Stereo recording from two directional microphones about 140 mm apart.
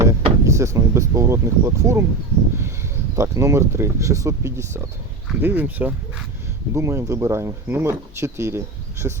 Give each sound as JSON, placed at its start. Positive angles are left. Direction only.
{"t": 0.0, "sound": "speech", "side_deg": -20}
{"t": 3.2, "sound": "speech", "side_deg": -20}